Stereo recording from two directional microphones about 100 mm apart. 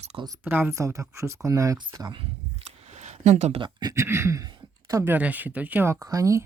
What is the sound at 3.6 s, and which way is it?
Speech, 45° right (ahead or behind).